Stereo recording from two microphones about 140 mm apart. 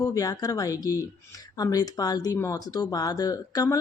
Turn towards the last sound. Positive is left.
turn(degrees=25)  # may be behind; listen again after turning